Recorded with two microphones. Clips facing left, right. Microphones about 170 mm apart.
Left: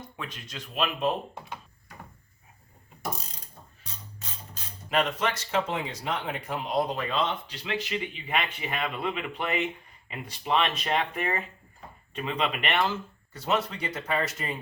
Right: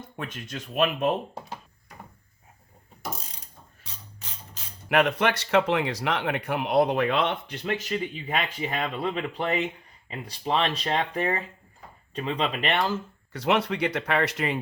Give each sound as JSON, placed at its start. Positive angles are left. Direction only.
{"t": 0.2, "sound": "speech", "side_deg": -50}
{"t": 4.9, "sound": "speech", "side_deg": -65}
{"t": 13.3, "sound": "speech", "side_deg": -70}